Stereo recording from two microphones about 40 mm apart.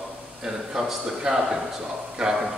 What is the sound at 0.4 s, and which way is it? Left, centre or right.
Speech, centre.